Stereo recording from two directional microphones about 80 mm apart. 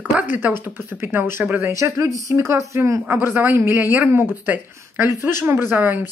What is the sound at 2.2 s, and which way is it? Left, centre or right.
A woman's voice, right.